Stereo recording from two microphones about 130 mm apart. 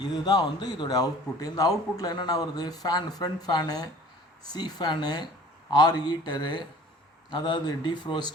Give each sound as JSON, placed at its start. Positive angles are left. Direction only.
{"t": 0.0, "sound": "a man's voice", "side_deg": 30}